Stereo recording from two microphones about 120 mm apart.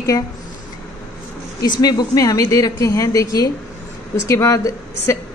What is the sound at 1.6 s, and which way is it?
A woman's voice, 35° left (ahead or behind).